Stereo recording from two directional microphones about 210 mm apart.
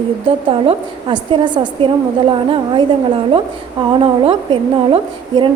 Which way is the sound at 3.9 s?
25° right (ahead or behind).